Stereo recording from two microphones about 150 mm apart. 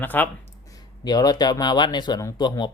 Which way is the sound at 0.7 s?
25° left (ahead or behind).